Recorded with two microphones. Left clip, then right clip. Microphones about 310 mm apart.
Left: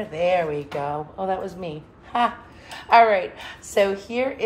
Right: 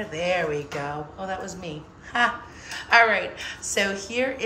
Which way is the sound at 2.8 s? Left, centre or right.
Centre.